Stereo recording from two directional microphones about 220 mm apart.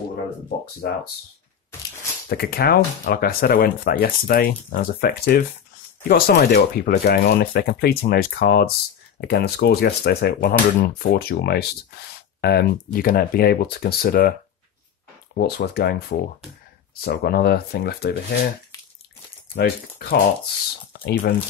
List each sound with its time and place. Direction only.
2.2 s speech: 45° left (ahead or behind)
15.3 s speech: 45° left (ahead or behind)
19.5 s speech: 45° left (ahead or behind)